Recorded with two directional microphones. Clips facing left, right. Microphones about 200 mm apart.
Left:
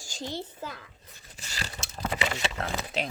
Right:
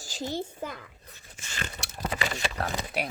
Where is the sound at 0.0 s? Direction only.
5° right (ahead or behind).